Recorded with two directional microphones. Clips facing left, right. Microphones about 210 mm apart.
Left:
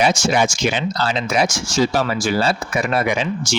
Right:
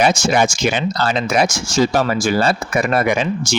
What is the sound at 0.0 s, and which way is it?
Speech, 50° right (ahead or behind).